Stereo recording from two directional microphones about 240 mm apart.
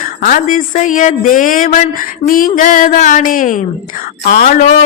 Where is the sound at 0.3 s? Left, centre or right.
Left.